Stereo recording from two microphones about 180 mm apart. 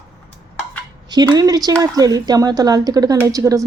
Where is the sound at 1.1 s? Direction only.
20° right (ahead or behind).